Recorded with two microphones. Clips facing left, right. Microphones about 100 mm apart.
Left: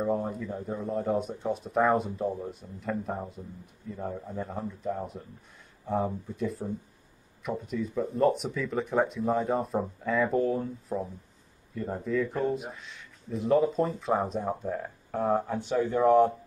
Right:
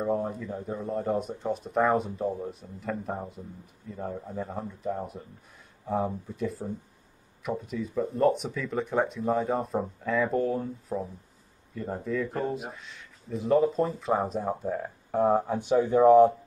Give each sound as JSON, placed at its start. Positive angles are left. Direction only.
{"t": 0.0, "sound": "speech", "side_deg": 0}
{"t": 16.0, "sound": "speech", "side_deg": -5}